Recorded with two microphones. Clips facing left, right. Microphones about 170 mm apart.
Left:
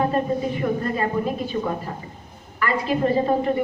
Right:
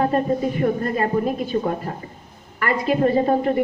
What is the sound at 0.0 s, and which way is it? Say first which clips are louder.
A woman's voice: right 2 dB; 45° right (ahead or behind).